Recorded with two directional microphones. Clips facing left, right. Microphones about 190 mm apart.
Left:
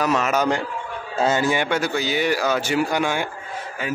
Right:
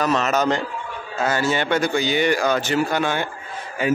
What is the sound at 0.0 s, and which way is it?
Speech, 10° left (ahead or behind).